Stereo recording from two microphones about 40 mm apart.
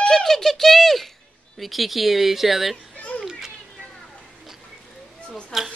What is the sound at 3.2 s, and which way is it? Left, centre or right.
Children playing, centre.